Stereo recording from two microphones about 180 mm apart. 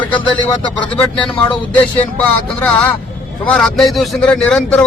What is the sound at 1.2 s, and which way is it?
Speech, 10° left (ahead or behind).